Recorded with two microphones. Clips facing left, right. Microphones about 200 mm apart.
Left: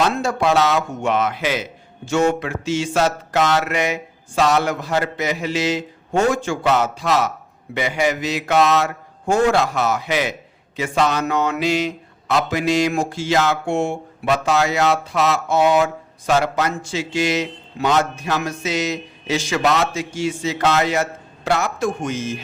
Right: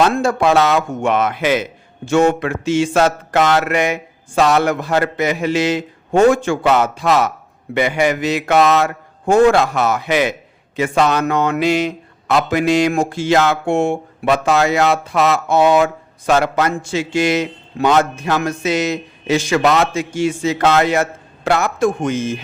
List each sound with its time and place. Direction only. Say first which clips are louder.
0.0 s speech: right 4 dB; 55° right (ahead or behind)